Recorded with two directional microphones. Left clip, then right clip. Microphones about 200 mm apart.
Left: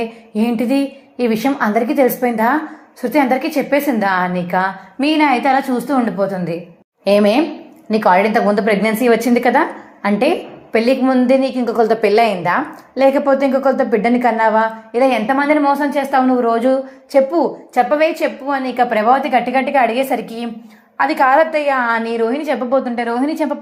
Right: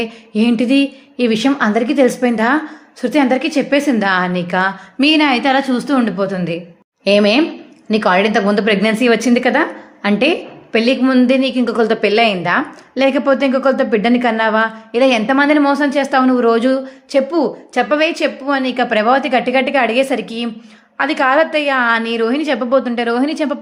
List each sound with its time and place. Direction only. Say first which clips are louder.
0.0 s a woman's voice: right 2 dB; 25° right (ahead or behind)